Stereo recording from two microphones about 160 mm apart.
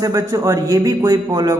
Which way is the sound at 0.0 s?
20° right (ahead or behind).